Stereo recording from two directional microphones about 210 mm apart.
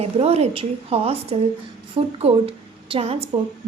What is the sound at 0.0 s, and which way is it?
A woman's voice, 30° right (ahead or behind).